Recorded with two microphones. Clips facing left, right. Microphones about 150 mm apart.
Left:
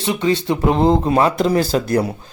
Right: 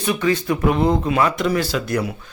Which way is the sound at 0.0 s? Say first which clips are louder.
Left 1 dB; 25° left (ahead or behind).